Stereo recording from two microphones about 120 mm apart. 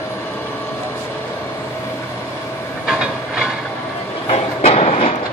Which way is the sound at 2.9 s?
10° right (ahead or behind).